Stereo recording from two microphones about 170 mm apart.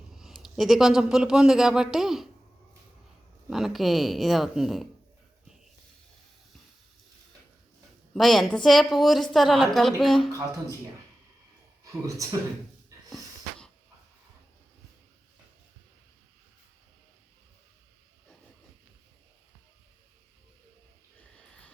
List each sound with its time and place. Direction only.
0.2 s a man's voice: centre (ahead or behind)
3.5 s a woman's voice: centre (ahead or behind)
8.1 s a woman's voice: centre (ahead or behind)
12.0 s speech: 20° right (ahead or behind)